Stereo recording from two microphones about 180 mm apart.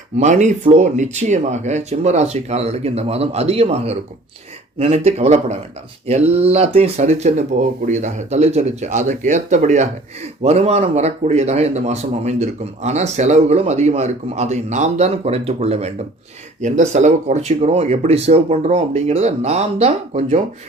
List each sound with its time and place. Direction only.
0.2 s speech: 40° right (ahead or behind)